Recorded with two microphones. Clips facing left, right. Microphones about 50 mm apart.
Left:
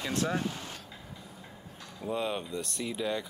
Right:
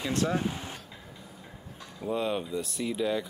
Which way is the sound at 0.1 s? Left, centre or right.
Centre.